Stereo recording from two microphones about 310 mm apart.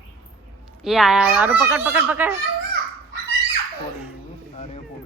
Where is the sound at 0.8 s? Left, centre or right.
Centre.